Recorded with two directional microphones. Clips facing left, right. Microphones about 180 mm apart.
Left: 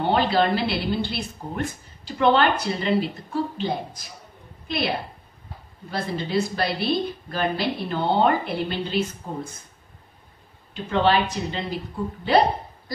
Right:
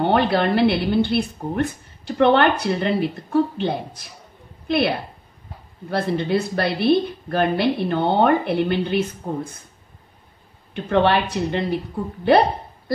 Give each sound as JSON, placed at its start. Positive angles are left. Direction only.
{"t": 0.0, "sound": "a woman's voice", "side_deg": -60}
{"t": 10.7, "sound": "a woman's voice", "side_deg": -60}
{"t": 12.3, "sound": "hiccup", "side_deg": -60}